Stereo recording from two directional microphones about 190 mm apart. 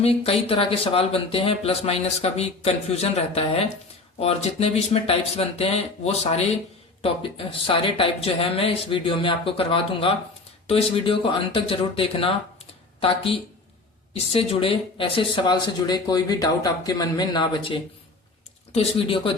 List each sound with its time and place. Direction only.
0.0 s speech: 30° left (ahead or behind)